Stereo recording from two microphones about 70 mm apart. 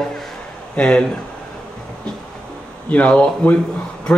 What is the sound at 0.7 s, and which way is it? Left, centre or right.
Speech, centre.